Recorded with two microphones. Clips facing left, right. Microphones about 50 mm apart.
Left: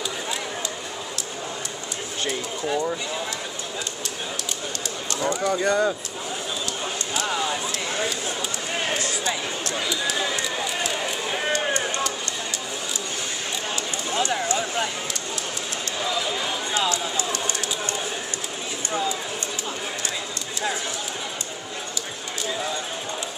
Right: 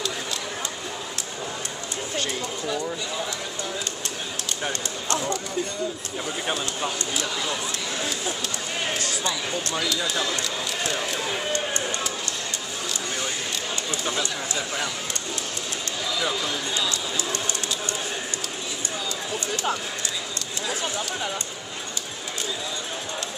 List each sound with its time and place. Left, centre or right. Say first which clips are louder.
2.2 s speech: left 2 dB; left
5.4 s speech: left 8 dB; left
11.0 s speech: left 1 dB; centre
14.1 s speech: left 5 dB; left
16.7 s speech: left 3 dB; left